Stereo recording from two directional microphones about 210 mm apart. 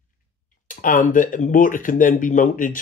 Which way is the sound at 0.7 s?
40° left (ahead or behind).